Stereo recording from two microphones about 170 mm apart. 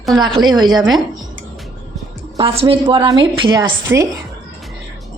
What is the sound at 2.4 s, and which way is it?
A woman's voice, 30° right (ahead or behind).